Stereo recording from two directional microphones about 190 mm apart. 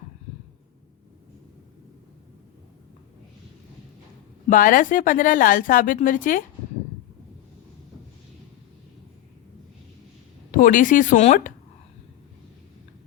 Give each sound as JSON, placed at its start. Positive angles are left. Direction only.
{"t": 4.4, "sound": "a woman's voice", "side_deg": 45}
{"t": 10.5, "sound": "a woman's voice", "side_deg": 45}